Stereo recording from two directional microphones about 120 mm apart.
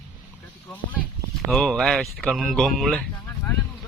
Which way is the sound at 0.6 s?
15° left (ahead or behind).